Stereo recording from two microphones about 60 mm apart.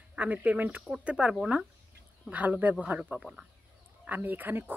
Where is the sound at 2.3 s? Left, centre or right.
Right.